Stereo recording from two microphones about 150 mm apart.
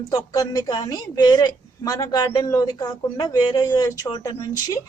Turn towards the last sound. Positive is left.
turn(degrees=25)  # may be behind; listen again after turning